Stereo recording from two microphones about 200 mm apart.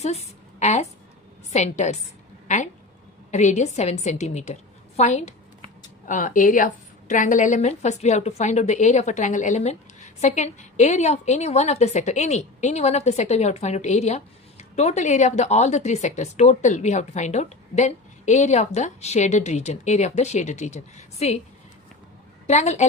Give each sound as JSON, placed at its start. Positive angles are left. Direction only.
{"t": 0.0, "sound": "a woman's voice", "side_deg": 30}
{"t": 22.4, "sound": "a woman's voice", "side_deg": 35}